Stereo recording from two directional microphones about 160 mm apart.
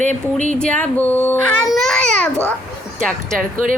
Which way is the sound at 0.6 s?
10° left (ahead or behind).